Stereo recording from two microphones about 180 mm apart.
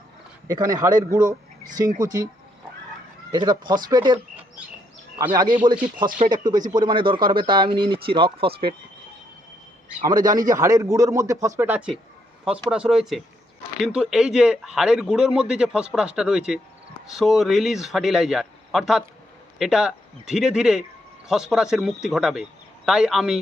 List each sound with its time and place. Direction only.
0.4 s speech: 20° right (ahead or behind)
3.3 s speech: 25° right (ahead or behind)
5.3 s speech: 25° right (ahead or behind)
10.0 s speech: 20° right (ahead or behind); by 23.4 s centre (ahead or behind)